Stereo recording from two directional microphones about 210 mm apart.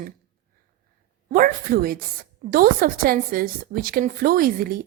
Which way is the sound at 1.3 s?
40° right (ahead or behind).